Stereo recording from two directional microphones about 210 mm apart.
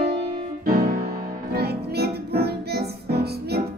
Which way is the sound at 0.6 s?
45° right (ahead or behind).